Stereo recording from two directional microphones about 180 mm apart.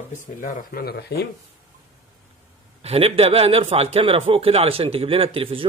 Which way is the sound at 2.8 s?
35° right (ahead or behind).